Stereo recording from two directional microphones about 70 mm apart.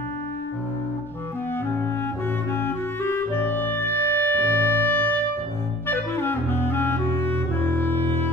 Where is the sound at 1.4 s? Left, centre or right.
Left.